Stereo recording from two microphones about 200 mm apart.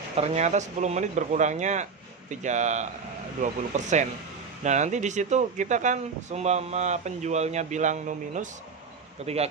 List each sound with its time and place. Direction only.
0.2 s speech: 35° right (ahead or behind)